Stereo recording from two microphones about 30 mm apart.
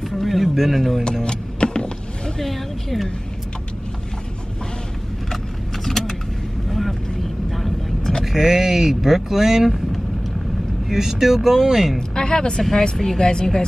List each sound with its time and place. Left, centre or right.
0.1 s speech: centre
1.2 s vehicle: left
2.4 s speech: centre
5.9 s vehicle: centre
8.3 s speech: centre
10.9 s speech: centre
12.2 s speech: left
12.9 s speech: centre
13.2 s a woman's voice: left